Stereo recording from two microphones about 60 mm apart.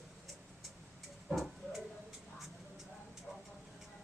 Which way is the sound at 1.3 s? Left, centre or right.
Centre.